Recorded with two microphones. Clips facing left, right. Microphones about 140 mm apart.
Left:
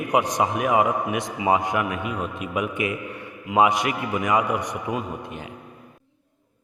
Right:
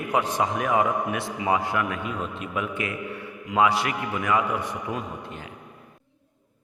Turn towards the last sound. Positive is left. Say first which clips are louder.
# left 3 dB
turn(degrees=15)  # may be behind; listen again after turning